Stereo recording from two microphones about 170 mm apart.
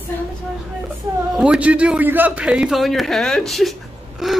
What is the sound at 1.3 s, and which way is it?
A man's voice, 5° right (ahead or behind).